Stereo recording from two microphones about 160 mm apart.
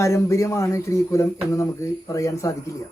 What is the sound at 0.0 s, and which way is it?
Speech, 20° left (ahead or behind).